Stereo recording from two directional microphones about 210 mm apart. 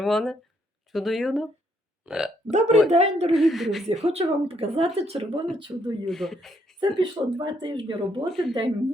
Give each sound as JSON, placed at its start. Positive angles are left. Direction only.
{"t": 0.0, "sound": "speech", "side_deg": 0}
{"t": 2.5, "sound": "a woman's voice", "side_deg": -35}
{"t": 3.3, "sound": "speech", "side_deg": 0}
{"t": 3.8, "sound": "speech", "side_deg": -30}
{"t": 6.1, "sound": "speech", "side_deg": 0}
{"t": 6.7, "sound": "speech", "side_deg": -20}
{"t": 8.3, "sound": "speech", "side_deg": 0}